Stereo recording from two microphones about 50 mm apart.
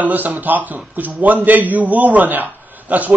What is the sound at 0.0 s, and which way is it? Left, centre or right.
A man's voice, right.